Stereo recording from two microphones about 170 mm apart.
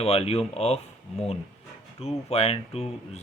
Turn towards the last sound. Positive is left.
turn(degrees=35)  # may be behind; listen again after turning